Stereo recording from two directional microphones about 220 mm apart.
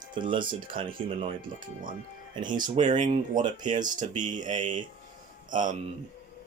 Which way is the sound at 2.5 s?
35° right (ahead or behind).